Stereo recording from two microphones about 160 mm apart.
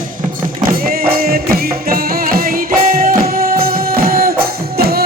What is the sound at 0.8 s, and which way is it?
Music, 65° right (ahead or behind).